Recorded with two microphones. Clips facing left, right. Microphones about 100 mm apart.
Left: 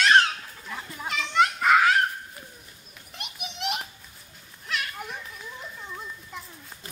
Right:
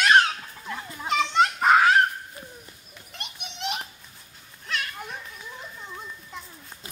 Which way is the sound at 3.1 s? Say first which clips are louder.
Left 2 dB; centre (ahead or behind).